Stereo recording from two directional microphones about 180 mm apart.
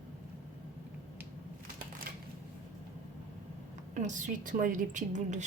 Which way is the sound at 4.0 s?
45° right (ahead or behind).